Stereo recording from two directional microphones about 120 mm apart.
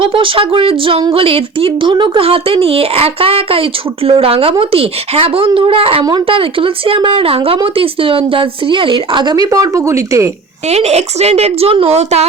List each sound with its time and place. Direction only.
0.0 s speech: 45° right (ahead or behind); by 10.3 s 25° right (ahead or behind)
10.7 s a woman's voice: 60° right (ahead or behind)